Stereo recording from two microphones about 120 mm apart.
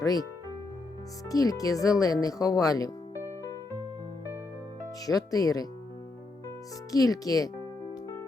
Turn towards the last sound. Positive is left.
turn(degrees=30)  # may be behind; listen again after turning